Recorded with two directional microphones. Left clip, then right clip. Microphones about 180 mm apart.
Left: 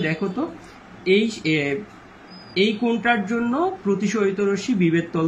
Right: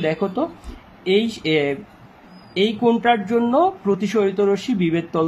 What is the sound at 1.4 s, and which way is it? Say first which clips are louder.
Speech: right 3 dB; 20° right (ahead or behind).